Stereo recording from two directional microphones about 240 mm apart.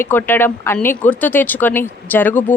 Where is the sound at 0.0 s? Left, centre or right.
Centre.